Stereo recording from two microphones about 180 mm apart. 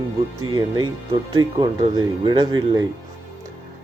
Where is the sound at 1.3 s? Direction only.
25° right (ahead or behind).